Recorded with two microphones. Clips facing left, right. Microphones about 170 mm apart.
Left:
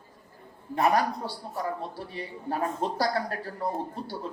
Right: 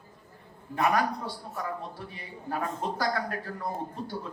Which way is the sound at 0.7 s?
30° left (ahead or behind).